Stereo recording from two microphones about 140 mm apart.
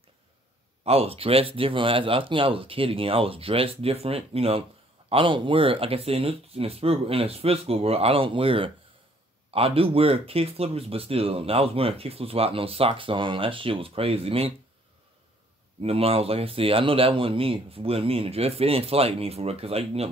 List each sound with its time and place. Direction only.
0.8 s speech: 45° right (ahead or behind)
15.8 s speech: 45° right (ahead or behind)